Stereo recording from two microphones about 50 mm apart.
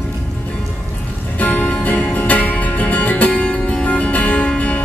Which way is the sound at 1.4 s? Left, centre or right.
Left.